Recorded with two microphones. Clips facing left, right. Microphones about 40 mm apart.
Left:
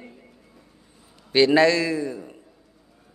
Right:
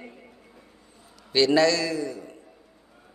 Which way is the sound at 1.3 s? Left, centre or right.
Left.